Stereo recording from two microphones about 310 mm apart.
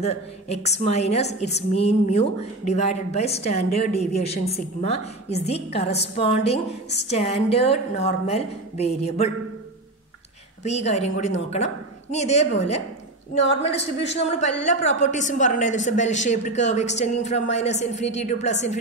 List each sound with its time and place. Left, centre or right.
0.0 s a woman's voice: left
10.6 s a woman's voice: left